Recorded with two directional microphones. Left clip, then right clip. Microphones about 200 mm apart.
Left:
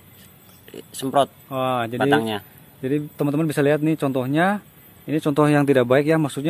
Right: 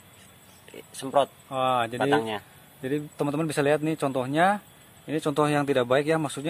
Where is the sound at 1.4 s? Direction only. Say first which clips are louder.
Left 2 dB; 15° left (ahead or behind).